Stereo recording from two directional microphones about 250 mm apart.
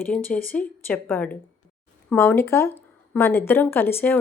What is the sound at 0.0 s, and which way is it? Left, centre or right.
A woman's voice, centre.